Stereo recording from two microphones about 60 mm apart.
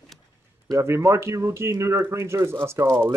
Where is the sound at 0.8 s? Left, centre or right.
Right.